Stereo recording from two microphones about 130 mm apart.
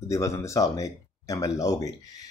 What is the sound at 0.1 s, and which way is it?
Speech, 25° left (ahead or behind).